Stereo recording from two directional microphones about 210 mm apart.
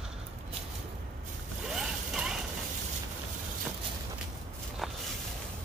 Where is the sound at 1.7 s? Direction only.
5° right (ahead or behind).